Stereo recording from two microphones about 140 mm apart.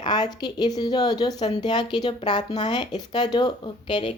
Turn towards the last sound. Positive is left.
turn(degrees=40)  # may be behind; listen again after turning